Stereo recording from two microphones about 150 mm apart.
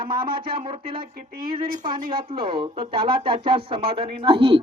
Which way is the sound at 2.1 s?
35° right (ahead or behind).